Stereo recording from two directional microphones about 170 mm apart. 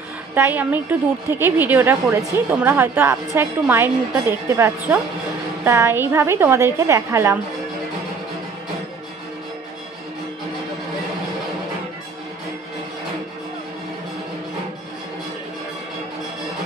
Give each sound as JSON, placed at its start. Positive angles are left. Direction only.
{"t": 0.3, "sound": "a woman's voice", "side_deg": -10}